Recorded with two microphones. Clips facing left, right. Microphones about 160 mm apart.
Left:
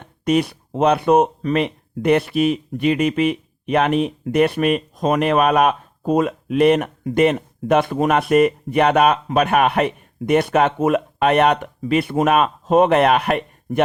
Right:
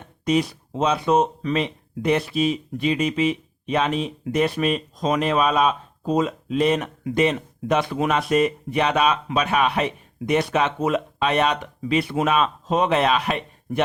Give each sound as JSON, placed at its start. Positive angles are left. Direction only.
{"t": 0.3, "sound": "speech", "side_deg": 60}